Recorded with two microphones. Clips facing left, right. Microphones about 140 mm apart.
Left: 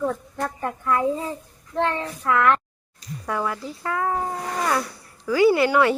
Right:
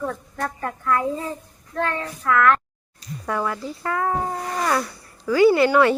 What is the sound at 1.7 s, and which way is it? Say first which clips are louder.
Child singing: left 2 dB; 20° left (ahead or behind).